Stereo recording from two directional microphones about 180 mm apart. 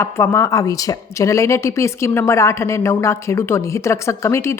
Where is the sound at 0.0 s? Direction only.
15° left (ahead or behind).